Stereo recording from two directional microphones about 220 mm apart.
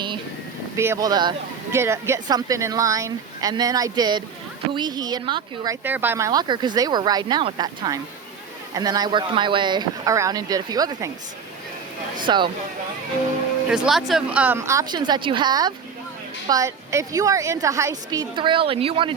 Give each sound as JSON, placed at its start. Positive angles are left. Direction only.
{"t": 0.8, "sound": "a woman's voice", "side_deg": -15}
{"t": 5.8, "sound": "a woman's voice", "side_deg": -10}
{"t": 12.2, "sound": "speech", "side_deg": -20}
{"t": 13.7, "sound": "a woman's voice", "side_deg": -5}